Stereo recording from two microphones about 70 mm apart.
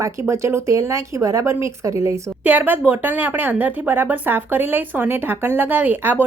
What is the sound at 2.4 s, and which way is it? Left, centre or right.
Speech, right.